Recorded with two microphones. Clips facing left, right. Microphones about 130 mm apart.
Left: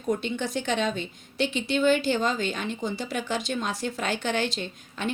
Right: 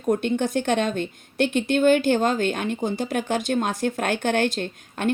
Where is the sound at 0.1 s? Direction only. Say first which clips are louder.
Right 6 dB; 55° right (ahead or behind).